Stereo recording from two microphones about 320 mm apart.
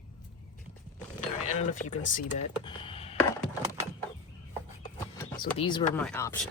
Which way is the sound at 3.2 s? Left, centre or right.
Centre.